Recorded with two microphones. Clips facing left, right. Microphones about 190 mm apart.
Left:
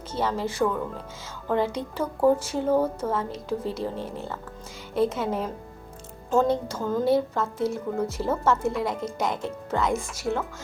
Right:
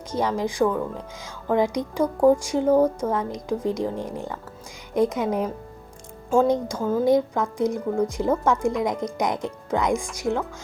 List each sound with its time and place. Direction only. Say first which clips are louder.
0.1 s a woman's voice: right 3 dB; 15° right (ahead or behind)